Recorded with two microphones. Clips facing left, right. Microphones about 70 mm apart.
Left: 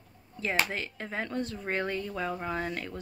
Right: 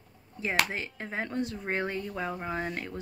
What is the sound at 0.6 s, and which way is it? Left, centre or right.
A woman's voice, right.